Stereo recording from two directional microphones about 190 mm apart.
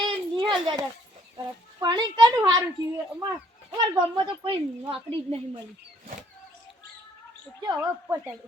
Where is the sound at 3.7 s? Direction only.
25° right (ahead or behind).